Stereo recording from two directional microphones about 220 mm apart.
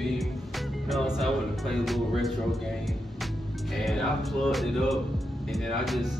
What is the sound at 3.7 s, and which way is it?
Speech, centre (ahead or behind).